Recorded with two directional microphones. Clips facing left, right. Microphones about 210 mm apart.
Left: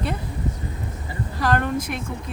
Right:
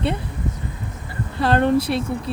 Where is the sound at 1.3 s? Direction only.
30° right (ahead or behind).